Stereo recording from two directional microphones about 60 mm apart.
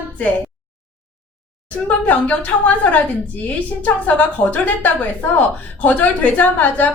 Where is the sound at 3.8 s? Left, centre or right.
Left.